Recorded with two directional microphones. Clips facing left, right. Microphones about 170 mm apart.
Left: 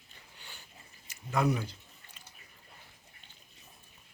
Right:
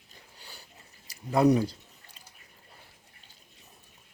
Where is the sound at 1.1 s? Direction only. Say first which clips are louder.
Right 8 dB; 35° right (ahead or behind).